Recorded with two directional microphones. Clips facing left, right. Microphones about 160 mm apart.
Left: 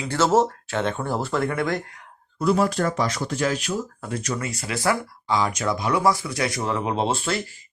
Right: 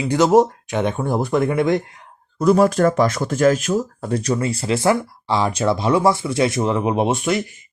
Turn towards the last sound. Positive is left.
turn(degrees=-15)  # may be behind; listen again after turning